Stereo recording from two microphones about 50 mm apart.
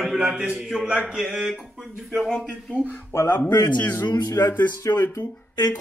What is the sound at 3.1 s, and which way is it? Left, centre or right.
Speech, left.